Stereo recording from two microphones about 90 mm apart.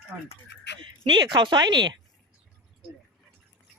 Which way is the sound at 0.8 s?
65° right (ahead or behind).